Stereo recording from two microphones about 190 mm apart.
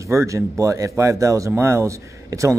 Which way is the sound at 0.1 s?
15° right (ahead or behind).